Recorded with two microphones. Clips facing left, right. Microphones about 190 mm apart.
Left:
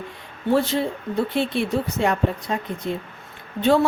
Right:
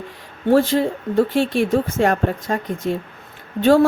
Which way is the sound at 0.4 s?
45° right (ahead or behind).